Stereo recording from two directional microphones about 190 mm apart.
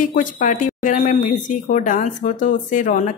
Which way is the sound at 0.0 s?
45° left (ahead or behind).